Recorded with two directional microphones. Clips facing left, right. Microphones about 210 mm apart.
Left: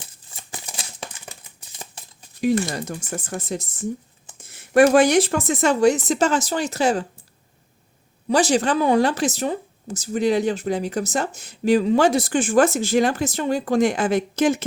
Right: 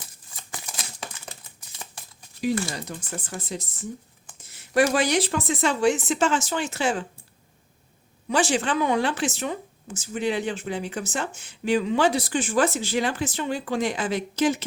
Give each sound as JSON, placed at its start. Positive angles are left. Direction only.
{"t": 0.0, "sound": "a sound", "side_deg": 25}
{"t": 3.1, "sound": "speech", "side_deg": 45}
{"t": 8.3, "sound": "speech", "side_deg": 40}